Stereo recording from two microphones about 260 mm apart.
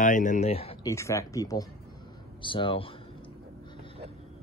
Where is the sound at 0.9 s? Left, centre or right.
Centre.